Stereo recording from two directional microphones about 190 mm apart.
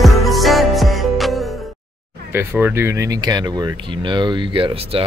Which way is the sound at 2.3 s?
10° right (ahead or behind).